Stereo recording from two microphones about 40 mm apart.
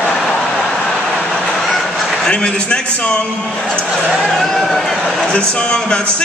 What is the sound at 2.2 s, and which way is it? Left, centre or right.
A man's voice, left.